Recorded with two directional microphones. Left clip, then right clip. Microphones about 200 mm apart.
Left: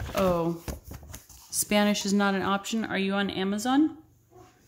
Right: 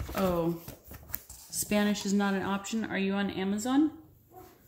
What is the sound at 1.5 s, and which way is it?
Speech, 30° left (ahead or behind).